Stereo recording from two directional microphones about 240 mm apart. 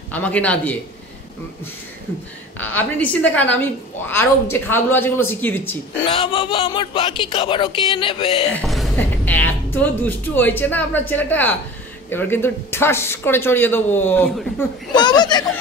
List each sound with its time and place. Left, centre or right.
0.1 s speech: centre
2.6 s speech: centre
6.0 s speech: left
8.5 s speech: centre